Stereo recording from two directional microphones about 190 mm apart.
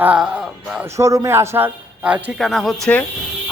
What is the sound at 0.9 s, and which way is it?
A man's voice, 15° right (ahead or behind).